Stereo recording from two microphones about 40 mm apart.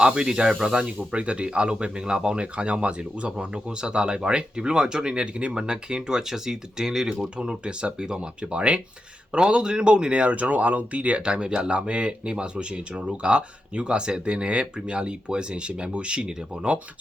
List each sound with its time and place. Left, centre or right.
0.0 s speech: right
7.3 s speech: right